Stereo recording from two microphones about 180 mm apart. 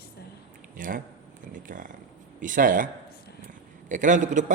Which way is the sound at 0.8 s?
50° right (ahead or behind).